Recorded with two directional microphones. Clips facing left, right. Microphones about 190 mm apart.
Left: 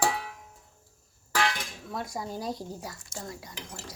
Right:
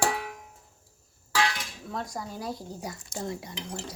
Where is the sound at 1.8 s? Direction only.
5° left (ahead or behind).